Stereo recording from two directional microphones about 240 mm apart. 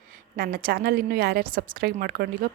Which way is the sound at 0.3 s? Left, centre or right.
Right.